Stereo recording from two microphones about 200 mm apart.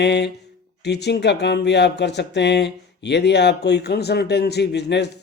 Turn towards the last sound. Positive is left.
turn(degrees=60)  # may be behind; listen again after turning